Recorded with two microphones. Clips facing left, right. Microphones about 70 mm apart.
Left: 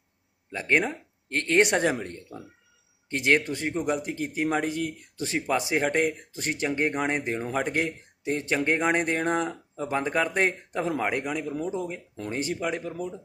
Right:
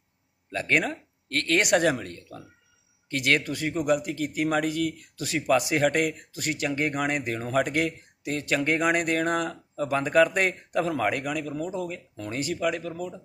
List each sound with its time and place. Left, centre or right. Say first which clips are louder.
0.5 s speech: even; centre